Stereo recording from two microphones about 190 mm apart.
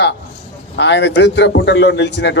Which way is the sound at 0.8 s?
65° left (ahead or behind).